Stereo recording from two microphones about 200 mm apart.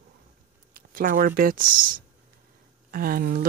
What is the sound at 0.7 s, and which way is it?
Speech, 45° right (ahead or behind).